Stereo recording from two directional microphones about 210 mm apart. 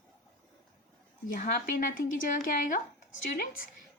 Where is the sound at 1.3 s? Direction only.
40° left (ahead or behind).